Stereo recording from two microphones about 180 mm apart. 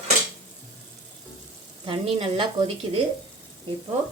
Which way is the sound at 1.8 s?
30° right (ahead or behind).